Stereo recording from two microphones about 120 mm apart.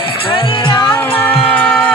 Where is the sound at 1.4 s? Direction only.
10° left (ahead or behind).